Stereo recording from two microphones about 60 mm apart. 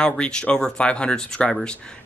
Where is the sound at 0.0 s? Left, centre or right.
Centre.